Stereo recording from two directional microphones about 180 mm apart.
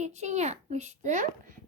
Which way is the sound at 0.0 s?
40° right (ahead or behind).